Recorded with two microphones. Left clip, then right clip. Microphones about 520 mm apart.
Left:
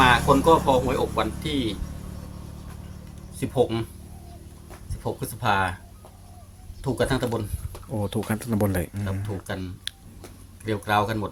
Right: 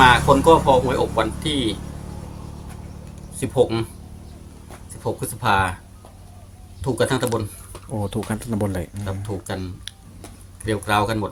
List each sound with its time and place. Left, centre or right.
0.0 s speech: left
3.4 s speech: left
5.2 s speech: left
6.8 s speech: left